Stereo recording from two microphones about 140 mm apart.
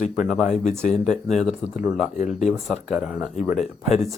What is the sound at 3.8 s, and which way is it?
Speech, 55° left (ahead or behind).